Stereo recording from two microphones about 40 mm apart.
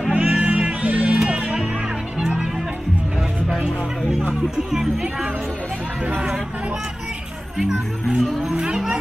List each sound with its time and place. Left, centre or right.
0.1 s music: right
2.1 s music: centre
4.3 s music: centre
7.6 s speech: right
8.5 s a sound: centre